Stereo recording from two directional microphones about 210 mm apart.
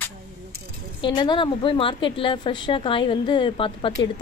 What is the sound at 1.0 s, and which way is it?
A woman's voice, 20° left (ahead or behind).